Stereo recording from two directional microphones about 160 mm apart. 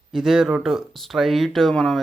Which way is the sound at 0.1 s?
5° right (ahead or behind).